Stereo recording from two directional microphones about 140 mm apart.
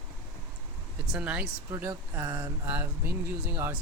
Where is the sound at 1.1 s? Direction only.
10° right (ahead or behind).